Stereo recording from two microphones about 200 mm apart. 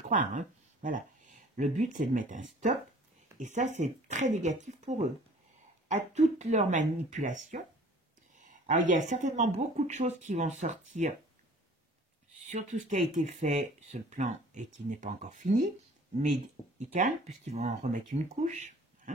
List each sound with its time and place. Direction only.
0.1 s speech: 40° right (ahead or behind)
12.4 s speech: 35° right (ahead or behind)
16.7 s speech: 35° right (ahead or behind)